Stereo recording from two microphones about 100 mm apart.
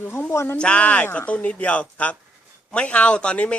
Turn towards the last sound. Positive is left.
turn(degrees=10)  # may be behind; listen again after turning